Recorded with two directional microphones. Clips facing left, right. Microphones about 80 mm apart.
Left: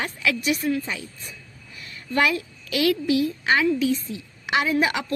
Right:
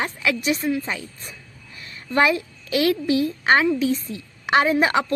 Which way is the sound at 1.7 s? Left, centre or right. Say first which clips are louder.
Right 3 dB; right.